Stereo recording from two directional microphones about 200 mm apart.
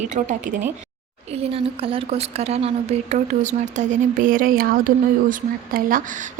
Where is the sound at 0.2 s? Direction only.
35° right (ahead or behind).